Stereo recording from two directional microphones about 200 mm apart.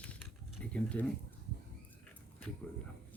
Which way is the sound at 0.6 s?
5° left (ahead or behind).